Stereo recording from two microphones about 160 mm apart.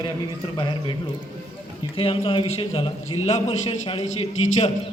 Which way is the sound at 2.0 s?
35° left (ahead or behind).